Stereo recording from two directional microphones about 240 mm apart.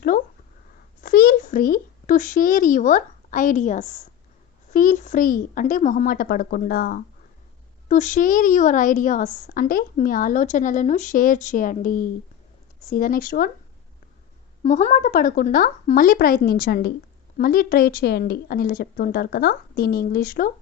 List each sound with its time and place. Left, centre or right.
0.1 s a sound: left
1.0 s a child's voice: left
14.6 s a woman's voice: left